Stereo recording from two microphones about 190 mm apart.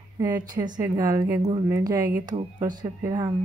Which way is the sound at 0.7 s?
15° right (ahead or behind).